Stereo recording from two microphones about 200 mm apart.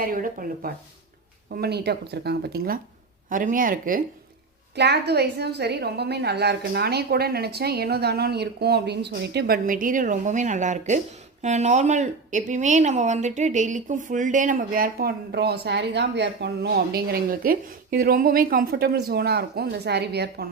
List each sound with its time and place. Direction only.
0.0 s speech: 45° right (ahead or behind)
4.7 s speech: 55° right (ahead or behind)